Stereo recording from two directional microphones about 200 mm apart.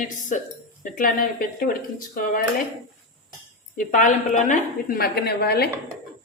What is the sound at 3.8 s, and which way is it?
A woman's voice, 40° left (ahead or behind).